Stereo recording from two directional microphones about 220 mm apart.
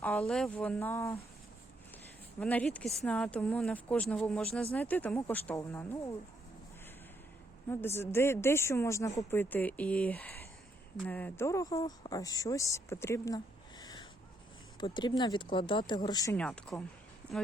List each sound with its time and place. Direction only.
0.0 s speech: 5° left (ahead or behind)
2.4 s speech: 5° left (ahead or behind)
7.7 s speech: 10° left (ahead or behind)